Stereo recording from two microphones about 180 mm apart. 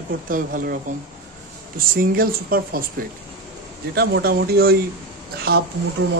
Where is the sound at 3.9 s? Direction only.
60° right (ahead or behind).